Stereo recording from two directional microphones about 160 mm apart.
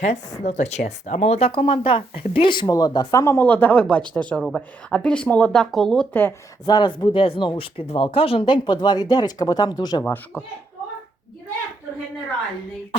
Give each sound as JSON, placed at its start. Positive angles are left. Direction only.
{"t": 0.0, "sound": "speech", "side_deg": 45}
{"t": 6.7, "sound": "speech", "side_deg": 30}
{"t": 10.0, "sound": "speech", "side_deg": 10}